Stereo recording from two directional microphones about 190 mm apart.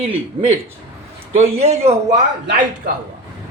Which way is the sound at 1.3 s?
35° right (ahead or behind).